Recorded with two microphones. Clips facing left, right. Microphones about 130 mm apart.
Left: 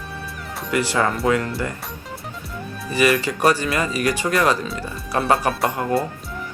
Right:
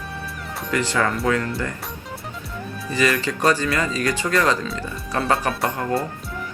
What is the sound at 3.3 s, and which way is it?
Speech, 15° left (ahead or behind).